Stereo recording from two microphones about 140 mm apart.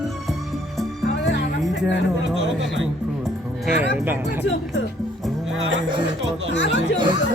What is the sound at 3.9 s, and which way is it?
Speech, 15° right (ahead or behind).